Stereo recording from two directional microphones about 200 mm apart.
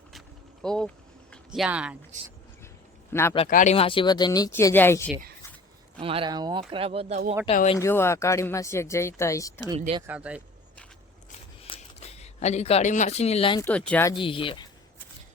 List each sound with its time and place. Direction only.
0.6 s a sound: 5° left (ahead or behind)
1.5 s speech: 5° right (ahead or behind)
3.1 s a man's voice: 10° left (ahead or behind)
3.5 s speech: 35° left (ahead or behind); by 5.1 s 10° left (ahead or behind)
6.0 s speech: 25° right (ahead or behind)
7.4 s speech: 30° left (ahead or behind)
7.8 s speech: 10° left (ahead or behind)
9.7 s speech: 30° right (ahead or behind)
10.1 s speech: 5° right (ahead or behind)
11.6 s a sound: 30° left (ahead or behind)
13.6 s speech: 5° left (ahead or behind)
14.1 s speech: 25° left (ahead or behind)